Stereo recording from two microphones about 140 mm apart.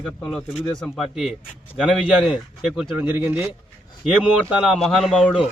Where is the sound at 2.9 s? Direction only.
15° right (ahead or behind).